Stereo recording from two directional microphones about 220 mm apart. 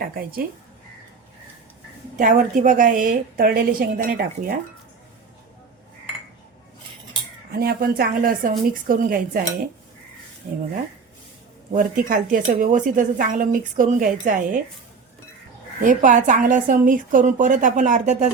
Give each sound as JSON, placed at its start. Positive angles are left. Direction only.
{"t": 0.0, "sound": "speech", "side_deg": -40}
{"t": 2.1, "sound": "speech", "side_deg": -35}
{"t": 7.5, "sound": "speech", "side_deg": -45}
{"t": 11.7, "sound": "speech", "side_deg": -35}
{"t": 15.8, "sound": "speech", "side_deg": -35}